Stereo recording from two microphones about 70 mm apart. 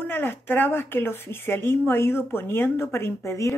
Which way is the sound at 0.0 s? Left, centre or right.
Left.